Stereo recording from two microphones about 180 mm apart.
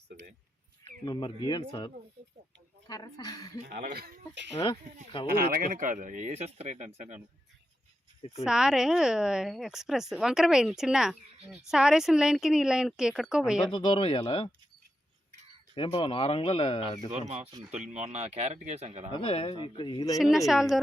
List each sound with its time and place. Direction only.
1.0 s speech: 25° left (ahead or behind)
3.9 s speech: 60° right (ahead or behind)
5.1 s speech: 30° left (ahead or behind)
5.5 s speech: 50° right (ahead or behind)
8.2 s speech: 35° left (ahead or behind)
8.4 s speech: 5° right (ahead or behind)
13.7 s speech: 30° left (ahead or behind)
15.7 s speech: 30° left (ahead or behind)
17.1 s speech: 35° right (ahead or behind)
19.1 s speech: 30° left (ahead or behind)
20.1 s speech: centre (ahead or behind)